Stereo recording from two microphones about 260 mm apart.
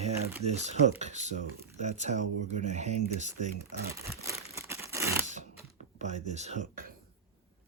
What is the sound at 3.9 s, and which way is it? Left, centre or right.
Crumpling, centre.